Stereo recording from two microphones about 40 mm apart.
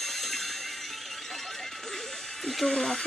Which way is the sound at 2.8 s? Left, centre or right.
Centre.